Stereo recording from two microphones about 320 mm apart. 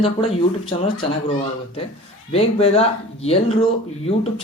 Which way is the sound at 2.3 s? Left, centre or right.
Centre.